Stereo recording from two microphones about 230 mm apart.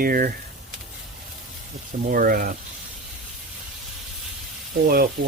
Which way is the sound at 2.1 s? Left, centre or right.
Right.